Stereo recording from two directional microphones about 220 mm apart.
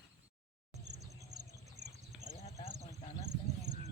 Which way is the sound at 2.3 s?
30° left (ahead or behind).